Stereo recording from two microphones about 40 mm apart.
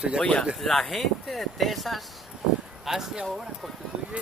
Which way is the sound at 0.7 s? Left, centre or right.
Centre.